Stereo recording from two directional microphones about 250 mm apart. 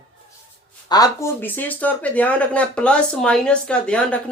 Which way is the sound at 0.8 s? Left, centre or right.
Centre.